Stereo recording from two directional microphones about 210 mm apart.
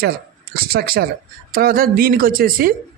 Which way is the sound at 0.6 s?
45° right (ahead or behind).